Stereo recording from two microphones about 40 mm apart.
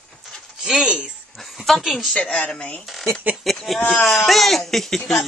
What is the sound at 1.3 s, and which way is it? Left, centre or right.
Speech, centre.